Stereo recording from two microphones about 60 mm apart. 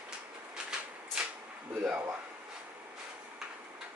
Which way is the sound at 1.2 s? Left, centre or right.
Centre.